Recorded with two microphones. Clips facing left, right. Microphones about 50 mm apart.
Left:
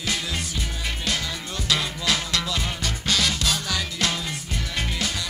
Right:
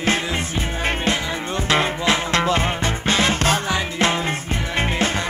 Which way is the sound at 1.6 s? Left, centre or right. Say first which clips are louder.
Right 6 dB; right.